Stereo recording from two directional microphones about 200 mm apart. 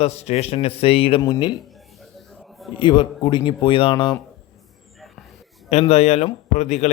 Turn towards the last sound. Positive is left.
turn(degrees=35)  # may be behind; listen again after turning